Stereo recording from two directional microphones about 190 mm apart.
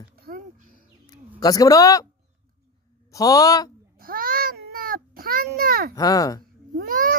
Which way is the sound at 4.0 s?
50° right (ahead or behind).